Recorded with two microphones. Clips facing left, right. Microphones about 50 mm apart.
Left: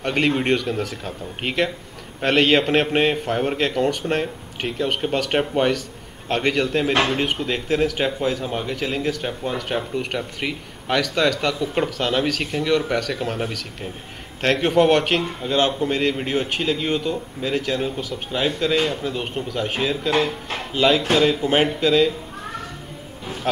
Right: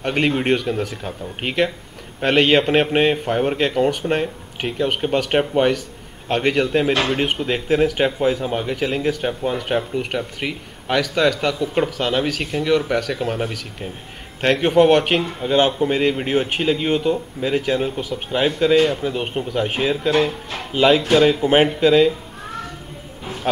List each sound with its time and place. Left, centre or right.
0.0 s speech: centre
23.5 s music: centre